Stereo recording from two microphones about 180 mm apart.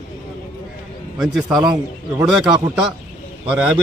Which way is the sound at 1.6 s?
25° right (ahead or behind).